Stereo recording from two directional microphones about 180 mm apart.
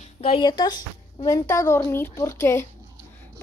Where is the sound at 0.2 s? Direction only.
30° left (ahead or behind).